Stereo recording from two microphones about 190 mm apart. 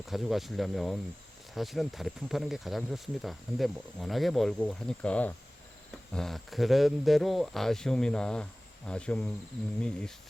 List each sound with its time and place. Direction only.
0.0 s speech: centre (ahead or behind)